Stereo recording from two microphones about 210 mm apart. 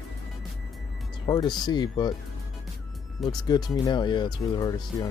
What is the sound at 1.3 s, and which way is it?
Speech, 20° left (ahead or behind).